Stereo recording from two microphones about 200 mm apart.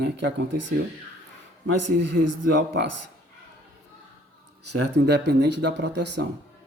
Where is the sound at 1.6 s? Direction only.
65° right (ahead or behind).